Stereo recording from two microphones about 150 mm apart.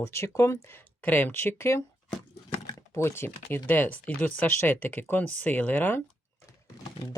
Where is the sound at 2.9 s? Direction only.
15° left (ahead or behind).